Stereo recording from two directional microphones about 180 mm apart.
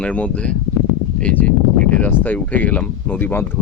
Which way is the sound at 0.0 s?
5° left (ahead or behind).